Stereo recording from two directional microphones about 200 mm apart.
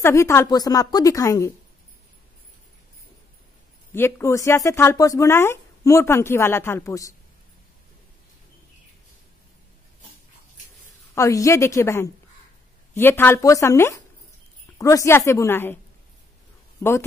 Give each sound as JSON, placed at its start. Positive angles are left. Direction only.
{"t": 0.0, "sound": "speech", "side_deg": 15}
{"t": 3.9, "sound": "speech", "side_deg": 10}
{"t": 11.1, "sound": "speech", "side_deg": 15}